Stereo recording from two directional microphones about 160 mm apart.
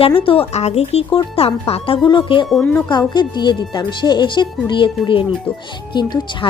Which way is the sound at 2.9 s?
25° left (ahead or behind).